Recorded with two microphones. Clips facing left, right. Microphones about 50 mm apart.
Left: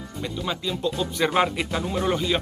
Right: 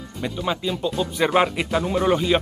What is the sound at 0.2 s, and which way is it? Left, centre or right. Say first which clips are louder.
Speech: right 4 dB; centre.